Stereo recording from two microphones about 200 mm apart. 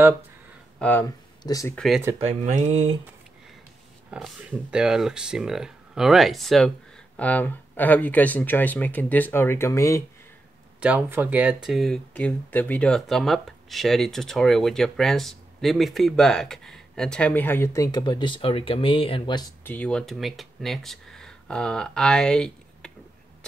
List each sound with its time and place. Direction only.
0.7 s speech: 10° left (ahead or behind)
2.1 s speech: 35° right (ahead or behind)
4.1 s speech: 5° right (ahead or behind); by 10.0 s 15° left (ahead or behind)
10.8 s speech: 5° right (ahead or behind); by 17.8 s 10° left (ahead or behind)
17.9 s speech: 20° left (ahead or behind)
19.6 s speech: 5° left (ahead or behind)